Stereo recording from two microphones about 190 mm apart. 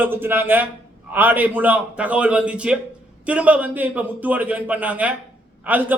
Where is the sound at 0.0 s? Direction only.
10° right (ahead or behind).